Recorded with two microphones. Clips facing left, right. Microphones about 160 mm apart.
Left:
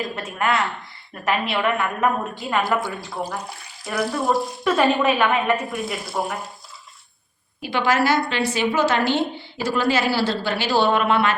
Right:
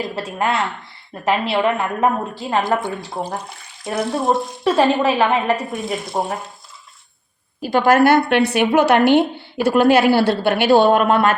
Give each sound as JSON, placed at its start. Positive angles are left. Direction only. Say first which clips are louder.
{"t": 0.0, "sound": "a woman's voice", "louder": "right 3 dB", "side_deg": -30}
{"t": 7.6, "sound": "a woman's voice", "louder": "right 7 dB", "side_deg": -45}